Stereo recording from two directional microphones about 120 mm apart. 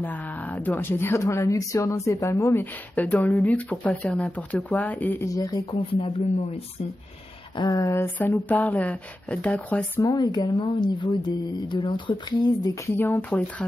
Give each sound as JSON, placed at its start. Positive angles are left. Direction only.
{"t": 0.0, "sound": "speech", "side_deg": 15}
{"t": 5.2, "sound": "speech", "side_deg": 30}
{"t": 5.9, "sound": "speech", "side_deg": 50}
{"t": 7.5, "sound": "speech", "side_deg": 35}
{"t": 10.0, "sound": "speech", "side_deg": 35}
{"t": 12.6, "sound": "speech", "side_deg": 20}